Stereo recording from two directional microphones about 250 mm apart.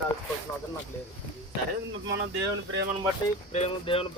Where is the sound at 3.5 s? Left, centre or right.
Left.